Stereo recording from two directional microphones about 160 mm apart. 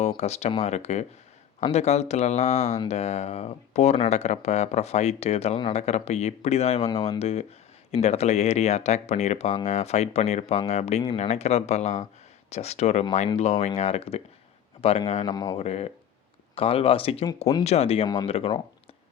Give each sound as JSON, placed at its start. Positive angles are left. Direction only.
{"t": 0.2, "sound": "speech", "side_deg": 40}
{"t": 15.5, "sound": "speech", "side_deg": 40}
{"t": 17.2, "sound": "speech", "side_deg": 25}
{"t": 17.6, "sound": "speech", "side_deg": 40}